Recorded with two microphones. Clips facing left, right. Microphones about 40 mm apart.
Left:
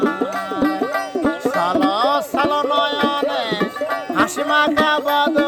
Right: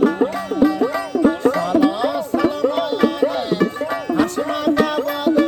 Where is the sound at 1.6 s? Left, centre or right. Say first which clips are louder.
Even; left.